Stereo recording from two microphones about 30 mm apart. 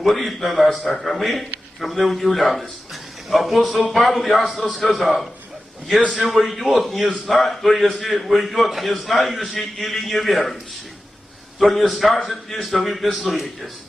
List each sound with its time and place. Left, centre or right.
0.0 s a man's voice: centre
6.3 s a man's voice: centre
11.6 s a man's voice: centre